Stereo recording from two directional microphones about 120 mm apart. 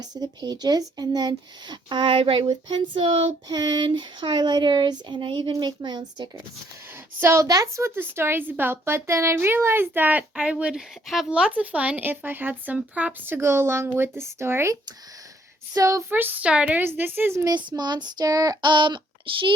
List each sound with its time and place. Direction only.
0.0 s speech: 35° right (ahead or behind)
2.5 s a sound: 40° right (ahead or behind)
3.5 s speech: 35° right (ahead or behind)
7.2 s a woman's voice: 20° right (ahead or behind)
16.0 s a woman's voice: 15° right (ahead or behind)
17.4 s speech: 40° right (ahead or behind)